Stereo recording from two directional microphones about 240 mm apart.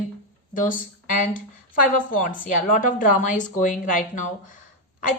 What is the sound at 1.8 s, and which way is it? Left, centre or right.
A woman's voice, left.